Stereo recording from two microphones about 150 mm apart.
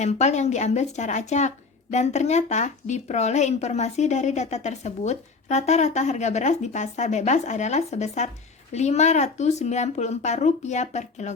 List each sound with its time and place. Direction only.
0.0 s speech: 50° left (ahead or behind)